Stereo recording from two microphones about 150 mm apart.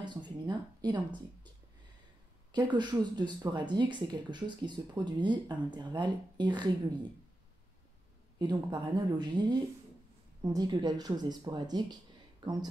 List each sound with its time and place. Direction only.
0.0 s speech: 30° right (ahead or behind)
2.5 s a woman's voice: 30° right (ahead or behind)
8.4 s speech: 30° right (ahead or behind)